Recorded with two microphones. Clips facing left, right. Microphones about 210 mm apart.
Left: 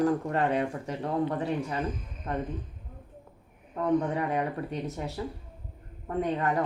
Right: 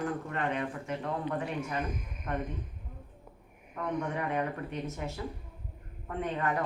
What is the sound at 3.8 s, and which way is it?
Speech, 35° left (ahead or behind).